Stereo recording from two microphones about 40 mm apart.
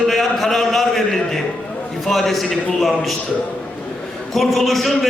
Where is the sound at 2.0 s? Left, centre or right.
Centre.